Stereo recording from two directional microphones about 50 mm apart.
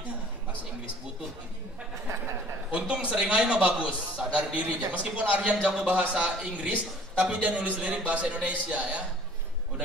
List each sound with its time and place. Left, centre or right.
2.7 s a man's voice: right